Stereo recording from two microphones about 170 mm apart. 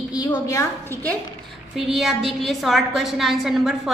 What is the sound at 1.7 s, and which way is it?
A woman's voice, centre (ahead or behind).